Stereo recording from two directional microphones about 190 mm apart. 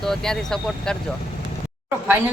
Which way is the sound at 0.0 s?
Centre (ahead or behind).